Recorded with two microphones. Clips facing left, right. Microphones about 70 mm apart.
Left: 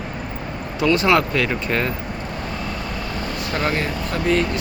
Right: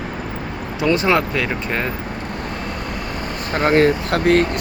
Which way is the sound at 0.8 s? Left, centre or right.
Right.